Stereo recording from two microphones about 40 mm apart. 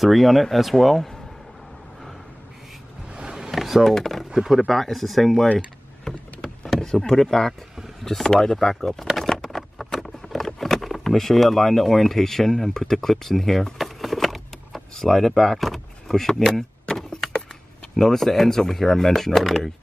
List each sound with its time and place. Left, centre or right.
0.0 s speech: centre
3.1 s a sound: right
3.5 s a sound: centre
3.8 s speech: centre
9.4 s patter: centre
10.0 s speech: centre
13.7 s vehicle: centre
16.9 s a sound: centre
17.9 s speech: centre